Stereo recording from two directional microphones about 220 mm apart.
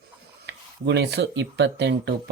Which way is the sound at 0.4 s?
50° right (ahead or behind).